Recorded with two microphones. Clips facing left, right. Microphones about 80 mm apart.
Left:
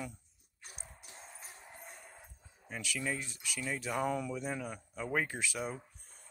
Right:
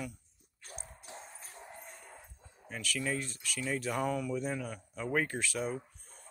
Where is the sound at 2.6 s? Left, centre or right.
Centre.